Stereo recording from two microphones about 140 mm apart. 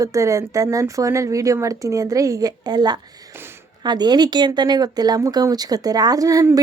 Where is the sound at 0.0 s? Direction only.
25° right (ahead or behind).